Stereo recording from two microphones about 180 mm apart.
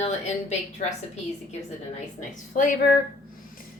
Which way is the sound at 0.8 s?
40° left (ahead or behind).